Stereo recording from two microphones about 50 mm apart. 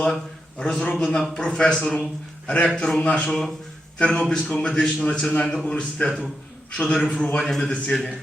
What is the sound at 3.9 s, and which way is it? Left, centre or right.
Speech, centre.